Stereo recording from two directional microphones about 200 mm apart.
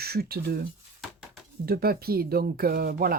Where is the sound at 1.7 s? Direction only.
50° right (ahead or behind).